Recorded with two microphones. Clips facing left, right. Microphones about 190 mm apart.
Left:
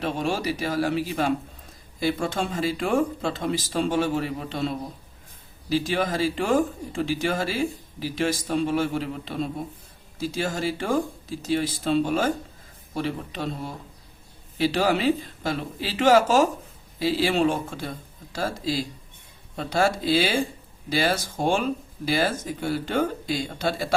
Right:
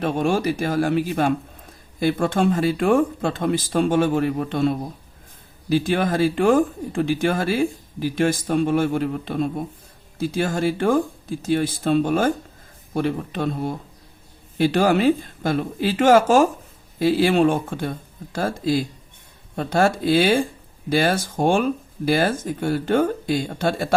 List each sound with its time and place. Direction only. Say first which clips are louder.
0.0 s speech: right 5 dB; 50° right (ahead or behind)